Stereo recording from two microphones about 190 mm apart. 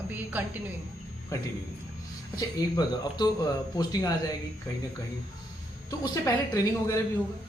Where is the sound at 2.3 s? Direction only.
20° left (ahead or behind).